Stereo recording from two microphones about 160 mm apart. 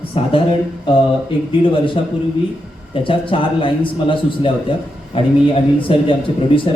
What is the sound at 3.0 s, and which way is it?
A man's voice, 30° left (ahead or behind).